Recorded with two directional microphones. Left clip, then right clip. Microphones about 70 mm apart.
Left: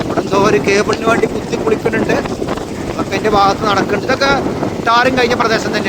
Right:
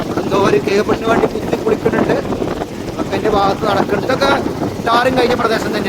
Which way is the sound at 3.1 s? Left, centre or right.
Left.